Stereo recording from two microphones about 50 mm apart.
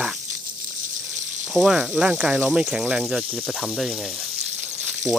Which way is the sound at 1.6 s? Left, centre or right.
Right.